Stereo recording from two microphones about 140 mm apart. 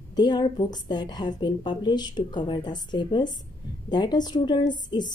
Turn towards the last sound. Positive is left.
turn(degrees=30)  # may be behind; listen again after turning